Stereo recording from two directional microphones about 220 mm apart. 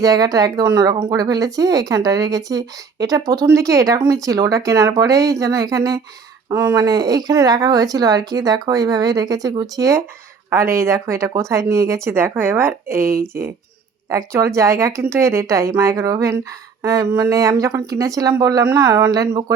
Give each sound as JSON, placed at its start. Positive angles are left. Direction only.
{"t": 0.0, "sound": "speech", "side_deg": -15}
{"t": 14.1, "sound": "speech", "side_deg": -15}